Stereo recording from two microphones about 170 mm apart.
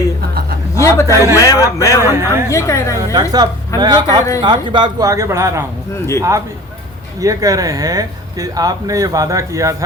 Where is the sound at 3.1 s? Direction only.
20° right (ahead or behind).